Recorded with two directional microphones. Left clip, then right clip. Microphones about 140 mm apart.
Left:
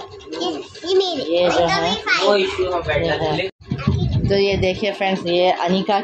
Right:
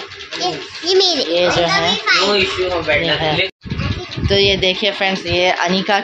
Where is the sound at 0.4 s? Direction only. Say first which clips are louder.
Right 4 dB; 15° right (ahead or behind).